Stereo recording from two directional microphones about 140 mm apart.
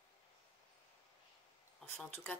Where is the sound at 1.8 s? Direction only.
15° left (ahead or behind).